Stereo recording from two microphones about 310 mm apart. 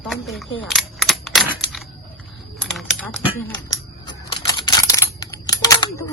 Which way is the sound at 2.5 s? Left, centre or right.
Centre.